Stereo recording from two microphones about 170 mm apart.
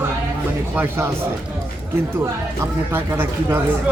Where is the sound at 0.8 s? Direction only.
15° right (ahead or behind).